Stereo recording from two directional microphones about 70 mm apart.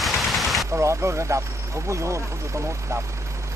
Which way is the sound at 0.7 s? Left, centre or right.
Right.